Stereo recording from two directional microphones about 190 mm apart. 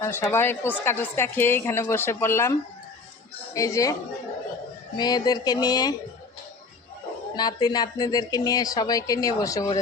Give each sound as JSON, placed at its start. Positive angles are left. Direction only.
{"t": 0.0, "sound": "a woman's voice", "side_deg": 15}
{"t": 3.5, "sound": "a woman's voice", "side_deg": 15}
{"t": 4.9, "sound": "speech", "side_deg": 20}
{"t": 7.3, "sound": "speech", "side_deg": 20}